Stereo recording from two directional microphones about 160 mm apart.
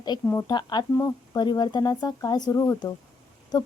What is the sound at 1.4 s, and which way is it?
A woman's voice, 25° left (ahead or behind).